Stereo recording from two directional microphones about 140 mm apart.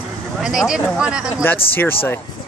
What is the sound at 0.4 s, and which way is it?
Speech, 5° right (ahead or behind).